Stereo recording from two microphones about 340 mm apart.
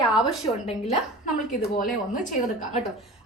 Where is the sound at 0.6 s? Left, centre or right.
Centre.